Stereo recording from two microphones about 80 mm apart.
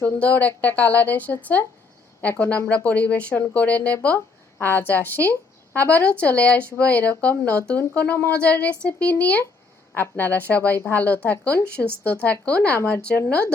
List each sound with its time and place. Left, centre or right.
0.0 s speech: centre